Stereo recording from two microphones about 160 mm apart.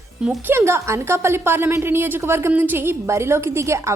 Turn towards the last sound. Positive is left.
turn(degrees=-15)  # may be behind; listen again after turning